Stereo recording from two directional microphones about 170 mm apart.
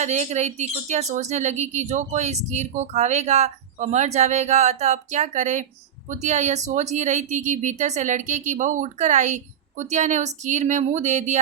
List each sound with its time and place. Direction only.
0.0 s speech: 40° right (ahead or behind)